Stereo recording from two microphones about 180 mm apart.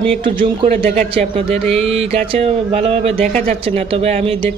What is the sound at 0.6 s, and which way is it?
Speech, 30° right (ahead or behind).